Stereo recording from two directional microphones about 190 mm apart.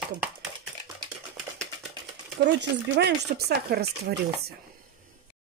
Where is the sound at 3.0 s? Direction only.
60° right (ahead or behind).